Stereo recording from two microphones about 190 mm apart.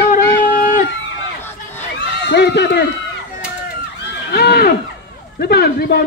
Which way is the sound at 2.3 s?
65° left (ahead or behind).